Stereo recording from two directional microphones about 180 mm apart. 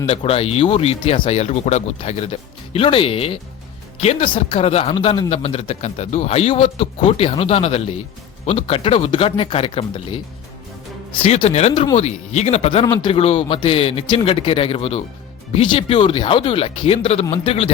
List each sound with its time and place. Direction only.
0.0 s speech: 30° left (ahead or behind)